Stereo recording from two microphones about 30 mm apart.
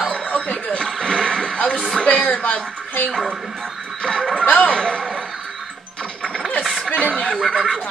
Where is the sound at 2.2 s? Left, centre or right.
Left.